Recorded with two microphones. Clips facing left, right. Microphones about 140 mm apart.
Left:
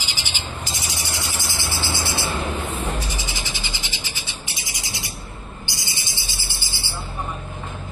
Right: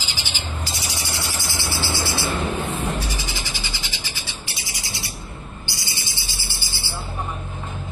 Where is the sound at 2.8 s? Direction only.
20° left (ahead or behind).